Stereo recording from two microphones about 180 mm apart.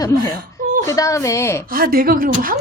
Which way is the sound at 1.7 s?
55° right (ahead or behind).